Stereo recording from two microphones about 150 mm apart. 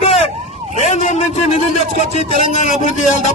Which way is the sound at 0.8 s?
55° left (ahead or behind).